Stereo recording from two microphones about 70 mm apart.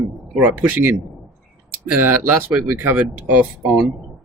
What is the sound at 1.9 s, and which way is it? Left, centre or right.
Speech, right.